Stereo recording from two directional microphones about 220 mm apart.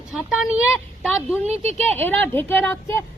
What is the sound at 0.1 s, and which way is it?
Speech, 5° right (ahead or behind).